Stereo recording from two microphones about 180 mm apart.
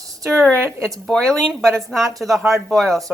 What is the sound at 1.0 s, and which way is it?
Speech, 5° left (ahead or behind).